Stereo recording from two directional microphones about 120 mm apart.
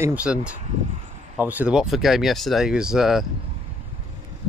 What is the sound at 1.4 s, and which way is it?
Speech, 15° right (ahead or behind).